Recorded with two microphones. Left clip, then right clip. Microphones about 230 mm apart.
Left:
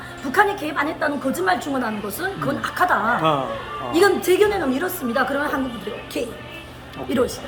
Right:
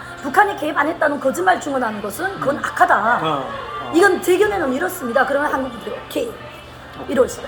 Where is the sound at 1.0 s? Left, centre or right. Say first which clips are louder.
Right 5 dB; left.